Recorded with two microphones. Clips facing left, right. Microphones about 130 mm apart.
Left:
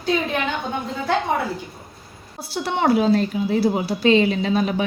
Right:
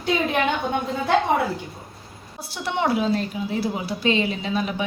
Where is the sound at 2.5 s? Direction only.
40° left (ahead or behind).